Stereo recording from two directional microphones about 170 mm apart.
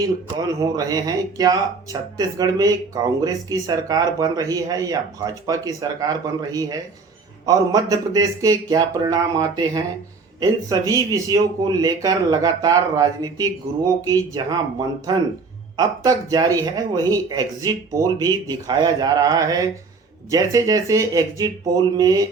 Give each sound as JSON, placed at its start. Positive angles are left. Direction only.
{"t": 0.3, "sound": "speech", "side_deg": -20}